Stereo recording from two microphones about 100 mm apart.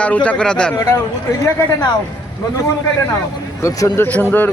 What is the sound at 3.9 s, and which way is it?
Speech, 20° left (ahead or behind).